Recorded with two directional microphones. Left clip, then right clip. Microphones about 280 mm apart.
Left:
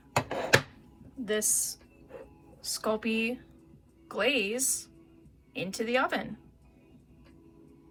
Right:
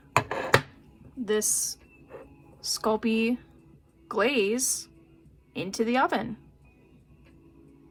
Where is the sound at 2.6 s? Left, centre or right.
Centre.